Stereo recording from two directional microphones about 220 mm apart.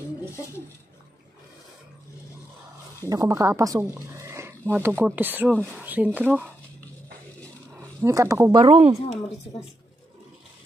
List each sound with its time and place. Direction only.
3.0 s speech: 15° right (ahead or behind)
8.0 s speech: 15° right (ahead or behind)
8.5 s speech: 25° right (ahead or behind)